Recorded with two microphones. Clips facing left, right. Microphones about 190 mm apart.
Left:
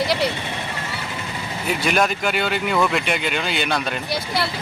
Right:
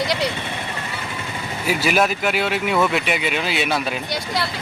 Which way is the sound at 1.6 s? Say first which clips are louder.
Right 1 dB; 5° right (ahead or behind).